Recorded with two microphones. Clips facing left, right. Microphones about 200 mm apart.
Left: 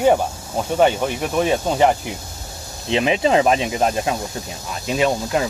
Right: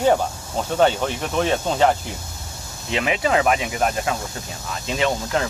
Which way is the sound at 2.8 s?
25° left (ahead or behind).